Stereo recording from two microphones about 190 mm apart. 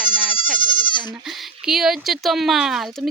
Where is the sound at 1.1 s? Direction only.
Centre (ahead or behind).